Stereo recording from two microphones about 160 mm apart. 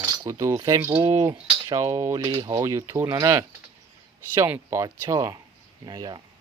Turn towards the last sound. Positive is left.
turn(degrees=-25)  # may be behind; listen again after turning